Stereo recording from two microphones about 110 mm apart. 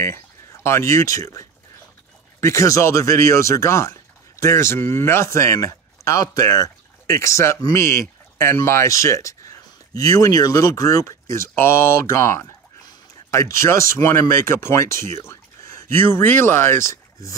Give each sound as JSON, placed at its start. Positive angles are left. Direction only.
{"t": 0.0, "sound": "speech", "side_deg": 25}